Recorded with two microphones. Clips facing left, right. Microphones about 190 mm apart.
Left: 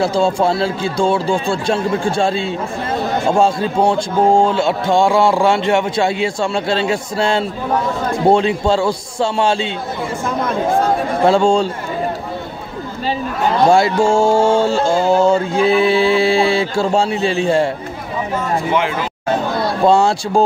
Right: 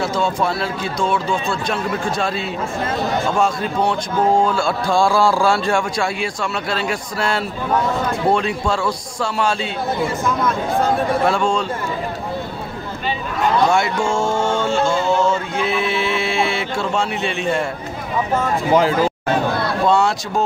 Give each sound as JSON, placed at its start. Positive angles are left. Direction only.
{"t": 0.0, "sound": "a man's voice", "side_deg": 30}
{"t": 11.2, "sound": "a man's voice", "side_deg": 30}
{"t": 13.7, "sound": "music", "side_deg": 30}
{"t": 18.7, "sound": "speech", "side_deg": -35}
{"t": 19.9, "sound": "a man's voice", "side_deg": 30}